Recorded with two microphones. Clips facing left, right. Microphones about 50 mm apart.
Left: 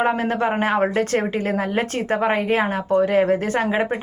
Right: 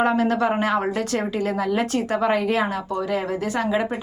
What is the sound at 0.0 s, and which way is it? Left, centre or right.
A woman's voice, left.